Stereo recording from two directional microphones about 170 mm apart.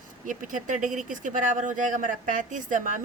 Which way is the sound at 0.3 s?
50° right (ahead or behind).